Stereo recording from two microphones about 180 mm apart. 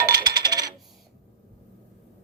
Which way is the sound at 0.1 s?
20° right (ahead or behind).